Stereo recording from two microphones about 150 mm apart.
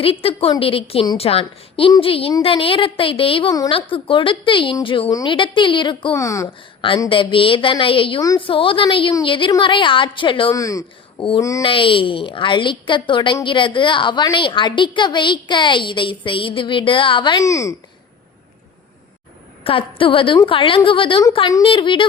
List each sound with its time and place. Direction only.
0.0 s a woman's voice: 40° left (ahead or behind)
5.0 s a woman's voice: 25° left (ahead or behind)
5.3 s a woman's voice: 35° left (ahead or behind)
6.1 s a woman's voice: 20° left (ahead or behind)
7.1 s a woman's voice: 35° left (ahead or behind)
10.5 s a woman's voice: 20° left (ahead or behind)
11.6 s a woman's voice: 35° left (ahead or behind)
17.4 s a woman's voice: 20° left (ahead or behind)
19.6 s a woman's voice: 35° left (ahead or behind)